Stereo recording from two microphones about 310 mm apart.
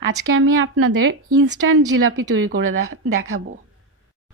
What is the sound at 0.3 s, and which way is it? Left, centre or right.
A woman's voice, right.